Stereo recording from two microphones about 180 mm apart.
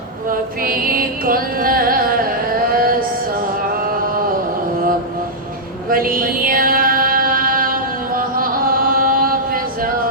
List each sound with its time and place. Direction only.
0.3 s carnatic music: 55° right (ahead or behind)
3.8 s a sound: 55° right (ahead or behind)
5.9 s mantra: 50° right (ahead or behind)